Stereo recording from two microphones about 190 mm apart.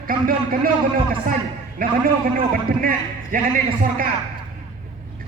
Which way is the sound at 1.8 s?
50° right (ahead or behind).